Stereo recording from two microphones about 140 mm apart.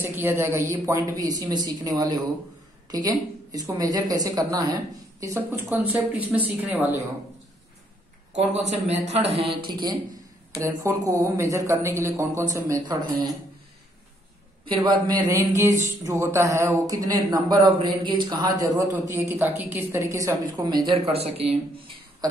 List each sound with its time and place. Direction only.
0.0 s speech: 15° right (ahead or behind)
8.3 s a man's voice: 55° right (ahead or behind)
9.7 s speech: 30° right (ahead or behind)
14.7 s speech: 35° right (ahead or behind)
21.1 s speech: 45° right (ahead or behind)
22.2 s speech: 25° right (ahead or behind)